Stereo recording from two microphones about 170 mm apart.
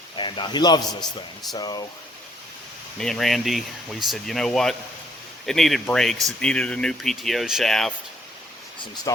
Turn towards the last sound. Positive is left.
turn(degrees=0)  # may be behind; listen again after turning